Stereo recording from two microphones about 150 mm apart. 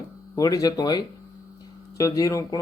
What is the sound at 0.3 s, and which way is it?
Speech, 25° left (ahead or behind).